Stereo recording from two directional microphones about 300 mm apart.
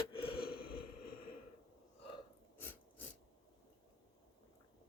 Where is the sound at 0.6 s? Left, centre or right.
Left.